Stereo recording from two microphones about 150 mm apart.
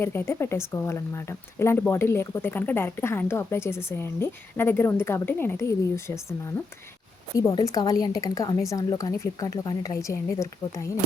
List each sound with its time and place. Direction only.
0.0 s a woman's voice: 15° left (ahead or behind)